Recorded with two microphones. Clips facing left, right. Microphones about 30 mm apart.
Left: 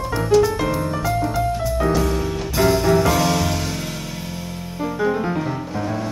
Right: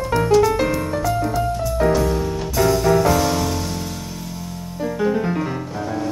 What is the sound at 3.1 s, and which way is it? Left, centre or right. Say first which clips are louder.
Music: even; left.